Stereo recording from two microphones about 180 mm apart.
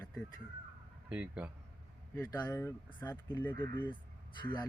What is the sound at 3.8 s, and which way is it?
Speech, 25° left (ahead or behind).